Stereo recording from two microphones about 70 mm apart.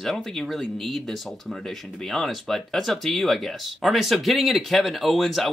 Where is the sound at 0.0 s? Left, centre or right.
Centre.